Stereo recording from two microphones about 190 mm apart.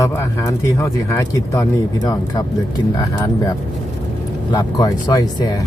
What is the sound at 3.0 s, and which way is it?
Speech, 20° left (ahead or behind).